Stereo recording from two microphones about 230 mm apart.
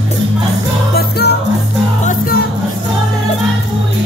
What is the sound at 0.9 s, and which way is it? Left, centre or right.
Music, left.